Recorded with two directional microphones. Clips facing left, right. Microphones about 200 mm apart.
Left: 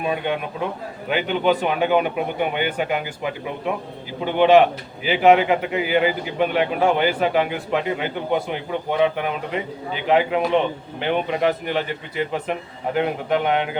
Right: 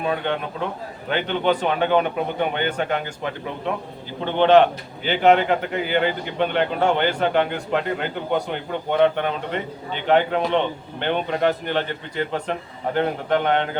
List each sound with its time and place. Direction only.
0.0 s a man's voice: 10° left (ahead or behind)